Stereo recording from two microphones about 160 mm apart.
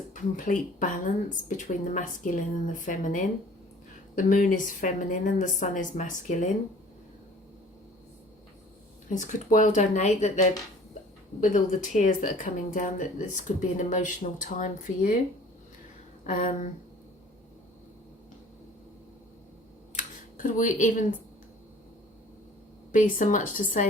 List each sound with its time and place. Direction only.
0.1 s a woman's voice: 55° left (ahead or behind)
9.0 s speech: 50° left (ahead or behind)
16.2 s a woman's voice: 55° left (ahead or behind)
20.0 s a sound: 55° left (ahead or behind)
22.9 s a woman's voice: 55° left (ahead or behind)